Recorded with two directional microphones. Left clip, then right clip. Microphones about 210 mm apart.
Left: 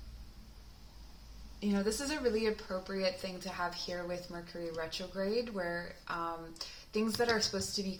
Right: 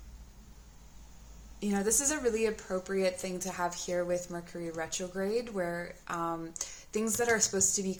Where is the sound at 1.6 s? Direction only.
30° right (ahead or behind).